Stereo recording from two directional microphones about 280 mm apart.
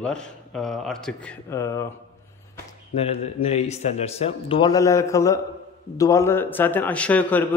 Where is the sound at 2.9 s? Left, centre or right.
Left.